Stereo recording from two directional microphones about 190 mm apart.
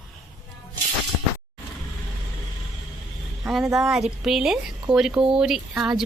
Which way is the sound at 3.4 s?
Centre (ahead or behind).